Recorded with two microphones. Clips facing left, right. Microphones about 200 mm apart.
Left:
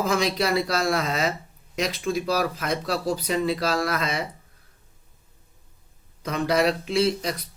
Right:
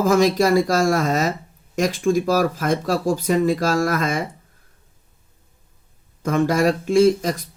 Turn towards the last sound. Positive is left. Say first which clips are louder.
# right 8 dB
turn(degrees=-45)  # may be behind; listen again after turning